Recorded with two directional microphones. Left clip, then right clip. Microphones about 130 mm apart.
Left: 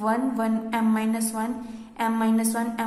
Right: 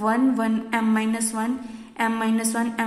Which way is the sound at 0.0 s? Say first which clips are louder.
Right 3 dB; 20° right (ahead or behind).